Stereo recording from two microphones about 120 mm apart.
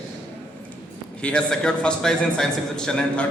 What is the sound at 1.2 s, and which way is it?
A man's voice, 10° left (ahead or behind).